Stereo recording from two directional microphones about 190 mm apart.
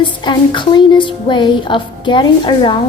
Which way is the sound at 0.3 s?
25° left (ahead or behind).